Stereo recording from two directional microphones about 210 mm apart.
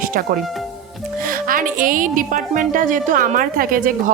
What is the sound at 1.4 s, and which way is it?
Speech, 40° right (ahead or behind).